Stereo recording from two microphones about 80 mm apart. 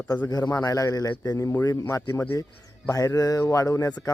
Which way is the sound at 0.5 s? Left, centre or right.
Left.